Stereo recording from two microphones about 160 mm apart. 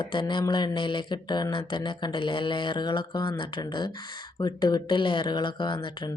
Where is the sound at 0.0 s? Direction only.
30° left (ahead or behind).